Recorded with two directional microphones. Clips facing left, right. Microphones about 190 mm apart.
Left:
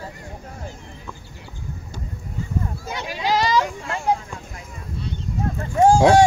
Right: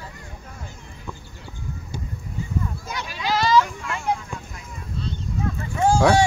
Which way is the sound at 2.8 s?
20° left (ahead or behind).